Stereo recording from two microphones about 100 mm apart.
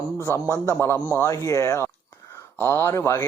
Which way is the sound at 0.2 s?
25° right (ahead or behind).